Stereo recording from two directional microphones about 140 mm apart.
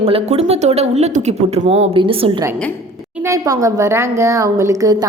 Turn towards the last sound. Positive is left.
turn(degrees=-25)  # may be behind; listen again after turning